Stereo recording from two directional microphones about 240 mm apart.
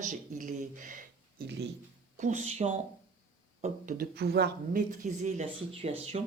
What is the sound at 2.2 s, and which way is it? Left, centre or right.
Speech, right.